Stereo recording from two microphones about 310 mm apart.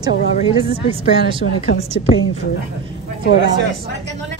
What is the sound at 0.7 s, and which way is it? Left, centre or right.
Speech, centre.